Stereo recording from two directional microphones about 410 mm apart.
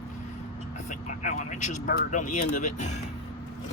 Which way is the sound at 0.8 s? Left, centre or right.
Centre.